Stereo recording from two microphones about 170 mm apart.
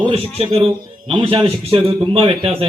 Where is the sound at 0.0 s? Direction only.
35° right (ahead or behind).